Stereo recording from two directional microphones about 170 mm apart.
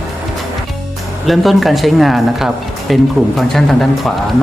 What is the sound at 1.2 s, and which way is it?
Speech, centre (ahead or behind).